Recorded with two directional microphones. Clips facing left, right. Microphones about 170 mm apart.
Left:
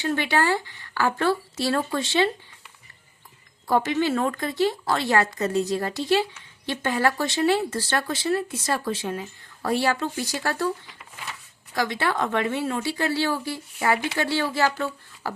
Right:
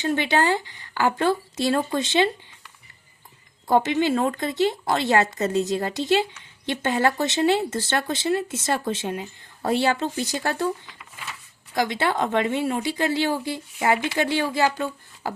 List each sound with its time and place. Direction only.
0.0 s speech: 20° right (ahead or behind)
3.7 s speech: 20° right (ahead or behind)
11.7 s speech: 20° right (ahead or behind)